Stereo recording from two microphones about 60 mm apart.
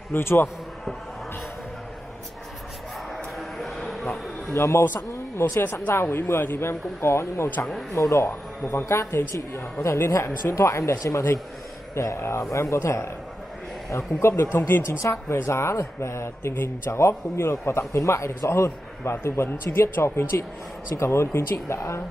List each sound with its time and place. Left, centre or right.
0.1 s speech: left
3.3 s a sound: centre
4.6 s speech: left
5.6 s speech: left